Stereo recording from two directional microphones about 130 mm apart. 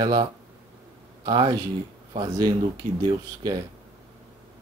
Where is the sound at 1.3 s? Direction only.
35° right (ahead or behind).